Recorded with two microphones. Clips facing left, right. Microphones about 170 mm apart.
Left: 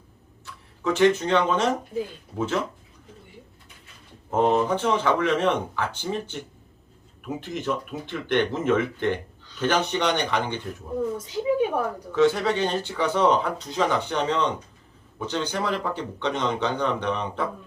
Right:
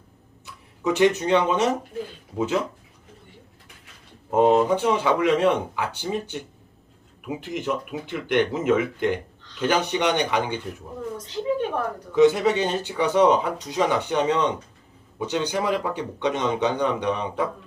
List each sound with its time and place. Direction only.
0.4 s speech: 15° right (ahead or behind)
4.3 s speech: 15° right (ahead or behind)
11.2 s a woman's voice: 10° left (ahead or behind)
12.1 s speech: 15° right (ahead or behind)